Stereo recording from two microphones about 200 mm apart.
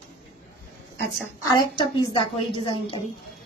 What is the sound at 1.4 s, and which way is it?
A woman's voice, 20° left (ahead or behind).